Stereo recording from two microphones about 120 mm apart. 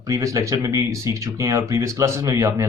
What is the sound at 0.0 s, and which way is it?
Speech, 25° right (ahead or behind).